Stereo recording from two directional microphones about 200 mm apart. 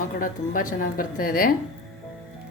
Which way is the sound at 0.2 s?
45° left (ahead or behind).